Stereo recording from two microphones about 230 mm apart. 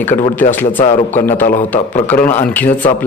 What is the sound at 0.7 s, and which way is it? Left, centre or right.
Speech, left.